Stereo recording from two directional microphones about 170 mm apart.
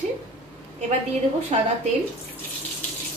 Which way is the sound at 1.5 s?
40° right (ahead or behind).